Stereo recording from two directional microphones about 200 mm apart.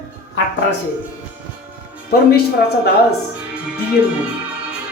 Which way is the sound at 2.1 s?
50° left (ahead or behind).